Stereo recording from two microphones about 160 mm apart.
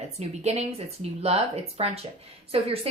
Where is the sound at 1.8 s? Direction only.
40° right (ahead or behind).